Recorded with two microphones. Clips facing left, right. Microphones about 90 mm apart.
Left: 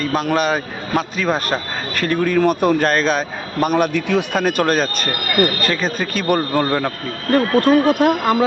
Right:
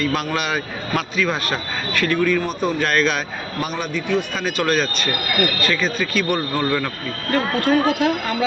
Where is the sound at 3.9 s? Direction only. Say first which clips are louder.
Left 4 dB; 75° left (ahead or behind).